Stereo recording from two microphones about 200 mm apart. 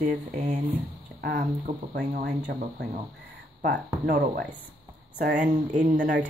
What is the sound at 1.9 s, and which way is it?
Speech, 55° right (ahead or behind).